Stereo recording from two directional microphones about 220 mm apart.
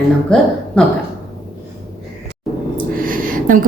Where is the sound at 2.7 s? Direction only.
40° right (ahead or behind).